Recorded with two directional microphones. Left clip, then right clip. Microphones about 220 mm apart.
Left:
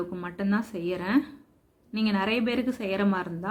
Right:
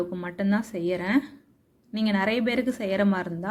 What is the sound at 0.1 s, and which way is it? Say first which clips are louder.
A woman's voice: right 2 dB; 10° right (ahead or behind).